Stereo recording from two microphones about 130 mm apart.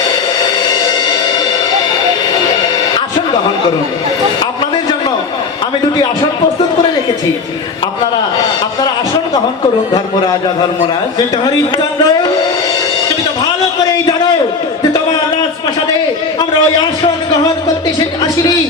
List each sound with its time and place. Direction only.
11.4 s speech: 30° left (ahead or behind)
16.4 s a man's voice: 35° left (ahead or behind)